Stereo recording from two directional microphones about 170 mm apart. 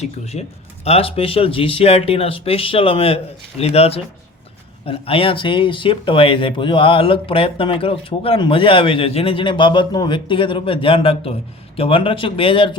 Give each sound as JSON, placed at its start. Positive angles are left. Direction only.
{"t": 0.0, "sound": "speech", "side_deg": 40}